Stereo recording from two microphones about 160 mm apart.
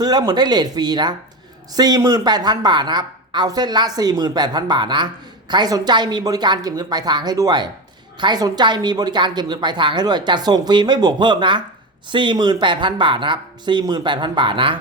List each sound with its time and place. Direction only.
0.0 s speech: 25° right (ahead or behind)